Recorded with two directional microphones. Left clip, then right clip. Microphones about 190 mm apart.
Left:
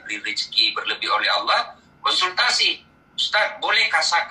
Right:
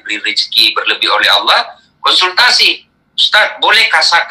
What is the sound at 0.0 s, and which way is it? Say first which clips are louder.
Speech: right 11 dB; 45° right (ahead or behind).